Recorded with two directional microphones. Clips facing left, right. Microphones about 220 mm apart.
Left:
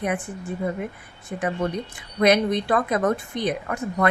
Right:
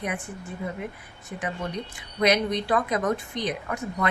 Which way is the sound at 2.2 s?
55° left (ahead or behind).